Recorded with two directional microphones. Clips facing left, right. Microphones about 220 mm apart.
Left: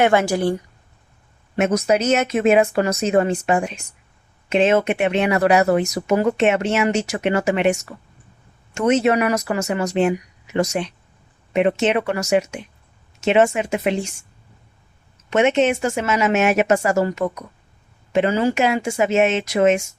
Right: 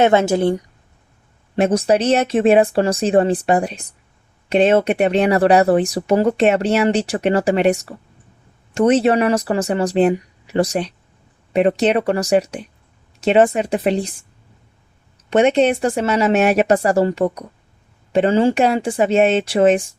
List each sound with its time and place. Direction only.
0.0 s a woman's voice: 20° right (ahead or behind)
1.5 s speech: 30° right (ahead or behind)
15.3 s speech: 35° right (ahead or behind)